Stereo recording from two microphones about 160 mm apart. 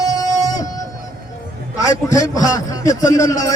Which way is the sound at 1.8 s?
20° left (ahead or behind).